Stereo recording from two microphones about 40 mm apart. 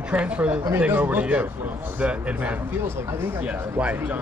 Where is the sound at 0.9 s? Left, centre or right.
Right.